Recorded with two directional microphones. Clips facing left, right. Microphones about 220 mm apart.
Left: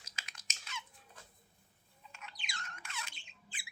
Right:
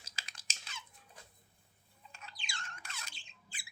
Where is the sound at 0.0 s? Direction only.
30° right (ahead or behind).